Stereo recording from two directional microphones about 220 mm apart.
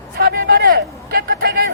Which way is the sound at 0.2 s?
45° right (ahead or behind).